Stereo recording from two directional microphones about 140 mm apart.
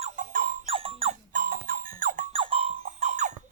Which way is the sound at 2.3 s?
40° right (ahead or behind).